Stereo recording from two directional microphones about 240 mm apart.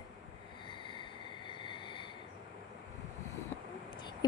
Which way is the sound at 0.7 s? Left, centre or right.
Centre.